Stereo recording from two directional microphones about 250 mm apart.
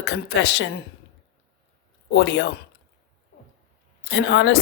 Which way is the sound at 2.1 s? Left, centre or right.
Left.